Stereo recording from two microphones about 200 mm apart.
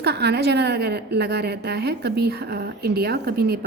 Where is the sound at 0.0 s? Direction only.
55° right (ahead or behind).